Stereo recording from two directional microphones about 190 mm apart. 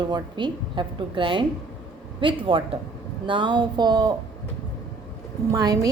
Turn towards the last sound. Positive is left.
turn(degrees=-20)  # may be behind; listen again after turning